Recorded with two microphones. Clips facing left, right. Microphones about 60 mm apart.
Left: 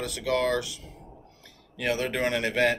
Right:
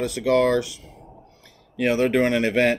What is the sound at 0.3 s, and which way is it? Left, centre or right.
Speech, right.